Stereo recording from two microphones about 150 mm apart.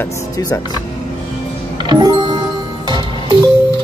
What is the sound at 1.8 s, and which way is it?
Music, 30° right (ahead or behind).